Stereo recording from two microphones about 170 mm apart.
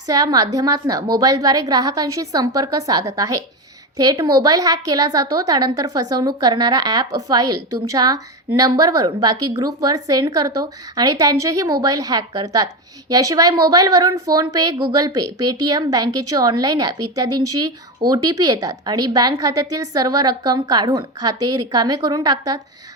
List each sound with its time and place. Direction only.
0.1 s a woman's voice: 20° right (ahead or behind)
18.1 s a woman's voice: 20° right (ahead or behind)